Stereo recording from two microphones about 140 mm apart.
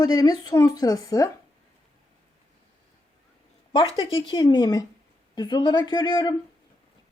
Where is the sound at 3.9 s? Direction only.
35° left (ahead or behind).